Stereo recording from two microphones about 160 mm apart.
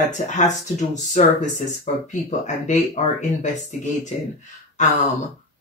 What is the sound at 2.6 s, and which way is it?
Speech, 50° left (ahead or behind).